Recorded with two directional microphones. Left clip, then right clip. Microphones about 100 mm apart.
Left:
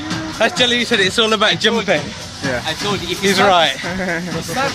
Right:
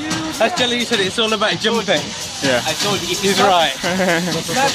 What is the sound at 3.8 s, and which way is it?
Speech, 35° right (ahead or behind).